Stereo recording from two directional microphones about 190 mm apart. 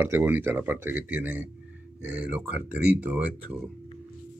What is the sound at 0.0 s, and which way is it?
Speech, 10° right (ahead or behind).